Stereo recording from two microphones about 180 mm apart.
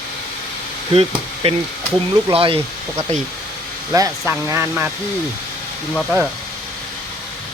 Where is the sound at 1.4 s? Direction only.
35° right (ahead or behind).